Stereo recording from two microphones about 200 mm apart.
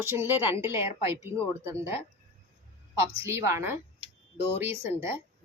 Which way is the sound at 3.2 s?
15° right (ahead or behind).